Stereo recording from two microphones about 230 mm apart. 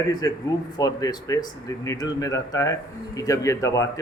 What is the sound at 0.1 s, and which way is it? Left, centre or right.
Speech, centre.